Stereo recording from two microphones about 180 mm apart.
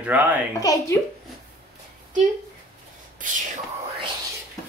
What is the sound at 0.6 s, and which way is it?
Speech, 20° left (ahead or behind).